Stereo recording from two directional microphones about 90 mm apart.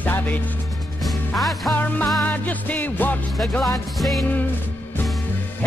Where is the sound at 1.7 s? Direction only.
15° left (ahead or behind).